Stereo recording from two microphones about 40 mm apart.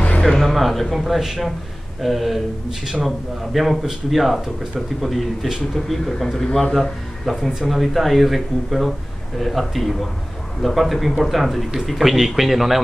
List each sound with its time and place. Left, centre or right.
0.2 s speech: centre
3.5 s a man's voice: centre